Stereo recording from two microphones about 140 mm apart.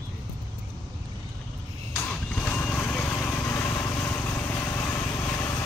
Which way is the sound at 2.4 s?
15° left (ahead or behind).